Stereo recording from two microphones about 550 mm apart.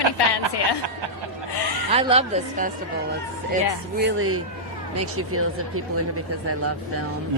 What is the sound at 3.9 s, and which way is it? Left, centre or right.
Music, right.